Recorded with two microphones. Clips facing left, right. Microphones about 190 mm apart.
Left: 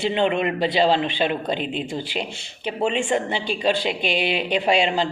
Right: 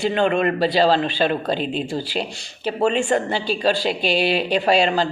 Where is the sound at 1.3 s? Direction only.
35° right (ahead or behind).